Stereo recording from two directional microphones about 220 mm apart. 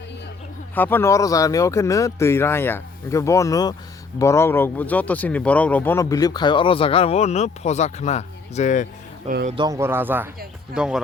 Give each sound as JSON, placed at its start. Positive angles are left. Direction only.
{"t": 0.8, "sound": "speech", "side_deg": 10}
{"t": 9.5, "sound": "speech", "side_deg": -20}